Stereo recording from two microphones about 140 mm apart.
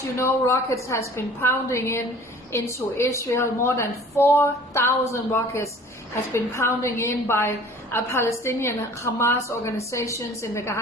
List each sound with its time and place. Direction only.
0.2 s a woman's voice: 20° left (ahead or behind)